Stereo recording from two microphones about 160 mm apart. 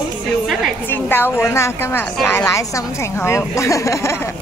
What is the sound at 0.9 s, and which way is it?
A woman's voice, 15° left (ahead or behind).